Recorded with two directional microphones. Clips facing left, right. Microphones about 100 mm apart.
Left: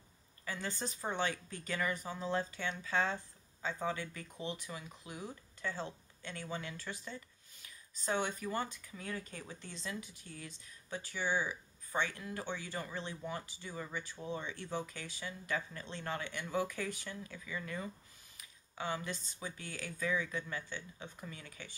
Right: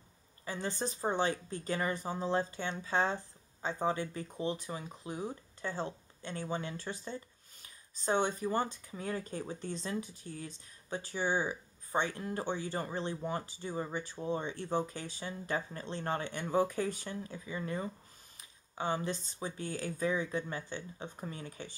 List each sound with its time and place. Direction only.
0.5 s speech: 30° right (ahead or behind)